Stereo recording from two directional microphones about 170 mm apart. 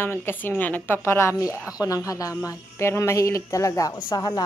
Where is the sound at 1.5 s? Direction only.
5° right (ahead or behind).